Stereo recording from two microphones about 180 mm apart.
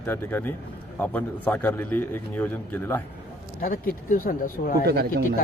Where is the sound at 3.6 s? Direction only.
50° left (ahead or behind).